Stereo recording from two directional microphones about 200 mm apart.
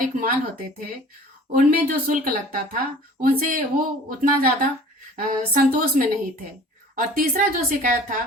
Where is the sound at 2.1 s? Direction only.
45° right (ahead or behind).